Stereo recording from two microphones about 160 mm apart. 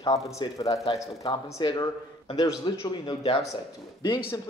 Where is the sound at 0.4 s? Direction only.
20° left (ahead or behind).